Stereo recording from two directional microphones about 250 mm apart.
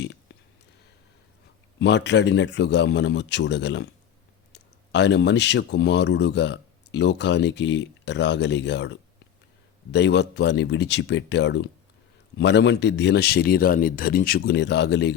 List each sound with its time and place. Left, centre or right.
1.8 s speech: left